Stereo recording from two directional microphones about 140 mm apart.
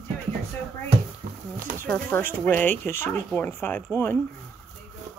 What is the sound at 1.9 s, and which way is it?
Speech, 15° left (ahead or behind).